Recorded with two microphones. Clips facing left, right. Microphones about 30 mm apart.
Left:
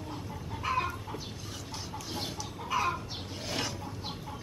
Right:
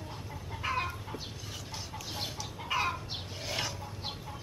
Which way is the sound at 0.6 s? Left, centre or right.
Centre.